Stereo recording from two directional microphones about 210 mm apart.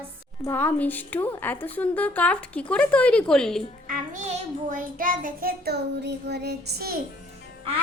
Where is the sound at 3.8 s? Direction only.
40° right (ahead or behind).